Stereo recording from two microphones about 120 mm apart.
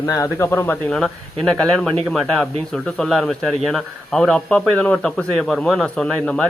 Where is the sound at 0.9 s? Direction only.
5° left (ahead or behind).